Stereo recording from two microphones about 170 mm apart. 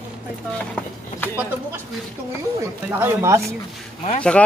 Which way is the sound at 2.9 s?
15° right (ahead or behind).